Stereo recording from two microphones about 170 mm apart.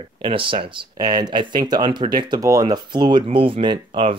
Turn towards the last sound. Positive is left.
turn(degrees=-30)  # may be behind; listen again after turning